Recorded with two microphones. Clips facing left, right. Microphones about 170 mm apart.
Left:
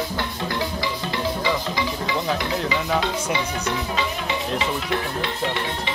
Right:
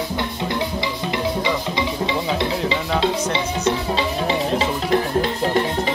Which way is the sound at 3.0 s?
30° right (ahead or behind).